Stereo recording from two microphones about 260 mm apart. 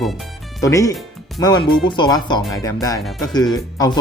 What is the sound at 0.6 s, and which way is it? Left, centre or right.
Speech, centre.